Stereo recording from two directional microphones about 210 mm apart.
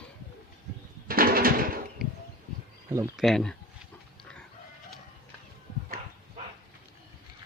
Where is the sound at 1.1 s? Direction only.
45° right (ahead or behind).